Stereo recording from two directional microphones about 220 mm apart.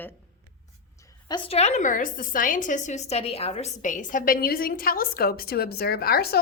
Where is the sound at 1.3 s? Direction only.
30° left (ahead or behind); by 6.4 s 45° left (ahead or behind).